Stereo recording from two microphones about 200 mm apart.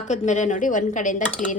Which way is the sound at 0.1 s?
35° left (ahead or behind).